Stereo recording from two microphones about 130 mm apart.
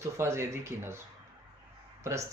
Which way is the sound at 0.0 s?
20° right (ahead or behind).